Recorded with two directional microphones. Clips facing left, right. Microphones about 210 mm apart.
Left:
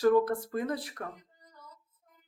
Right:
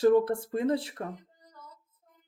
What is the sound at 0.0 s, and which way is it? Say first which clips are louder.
Speech: right 2 dB; 25° right (ahead or behind).